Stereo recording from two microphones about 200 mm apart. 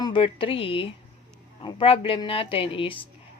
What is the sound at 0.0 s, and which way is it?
Speech, 25° left (ahead or behind).